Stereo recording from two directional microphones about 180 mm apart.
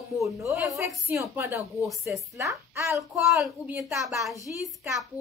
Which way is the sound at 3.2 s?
Centre (ahead or behind).